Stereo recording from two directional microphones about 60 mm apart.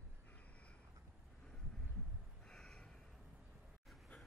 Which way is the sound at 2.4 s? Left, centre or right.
Centre.